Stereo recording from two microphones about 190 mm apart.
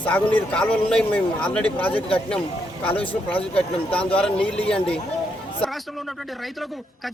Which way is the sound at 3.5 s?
5° left (ahead or behind).